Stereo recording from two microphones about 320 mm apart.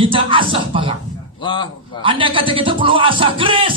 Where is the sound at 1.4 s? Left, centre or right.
Centre.